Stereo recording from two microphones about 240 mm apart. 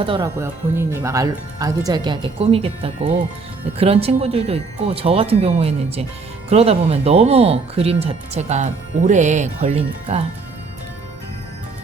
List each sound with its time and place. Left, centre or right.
0.0 s speech: right
0.3 s speech: centre; by 10.2 s right